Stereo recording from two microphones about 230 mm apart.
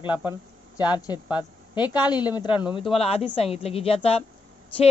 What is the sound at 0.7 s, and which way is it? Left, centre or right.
A woman's voice, centre.